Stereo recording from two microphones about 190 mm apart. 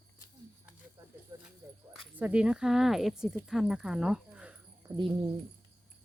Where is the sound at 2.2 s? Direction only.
5° right (ahead or behind).